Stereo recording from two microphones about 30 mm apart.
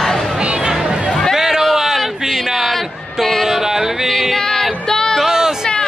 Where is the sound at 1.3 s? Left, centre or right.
Centre.